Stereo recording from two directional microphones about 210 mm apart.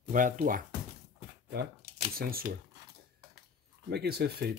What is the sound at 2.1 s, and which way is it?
Speech, 45° right (ahead or behind).